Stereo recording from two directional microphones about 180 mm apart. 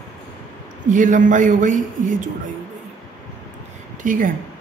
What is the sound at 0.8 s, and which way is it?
A woman's voice, 45° right (ahead or behind).